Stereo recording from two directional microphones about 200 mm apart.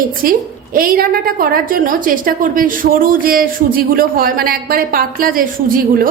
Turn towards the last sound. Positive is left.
turn(degrees=-45)  # may be behind; listen again after turning